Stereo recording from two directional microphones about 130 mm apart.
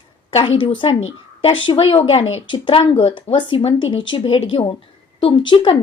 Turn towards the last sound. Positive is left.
turn(degrees=40)  # may be behind; listen again after turning